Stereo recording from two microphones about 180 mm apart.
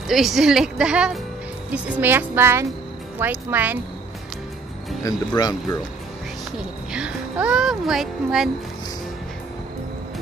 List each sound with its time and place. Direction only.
0.1 s speech: centre (ahead or behind)
5.0 s speech: 20° left (ahead or behind)
6.9 s speech: 5° right (ahead or behind)